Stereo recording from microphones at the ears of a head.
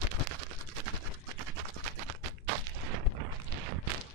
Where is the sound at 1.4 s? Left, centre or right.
Right.